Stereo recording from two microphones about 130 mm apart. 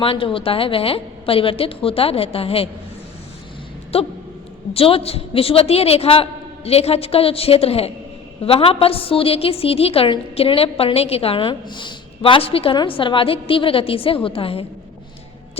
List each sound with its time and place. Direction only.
0.0 s a woman's voice: 45° left (ahead or behind)
3.9 s a woman's voice: 50° left (ahead or behind)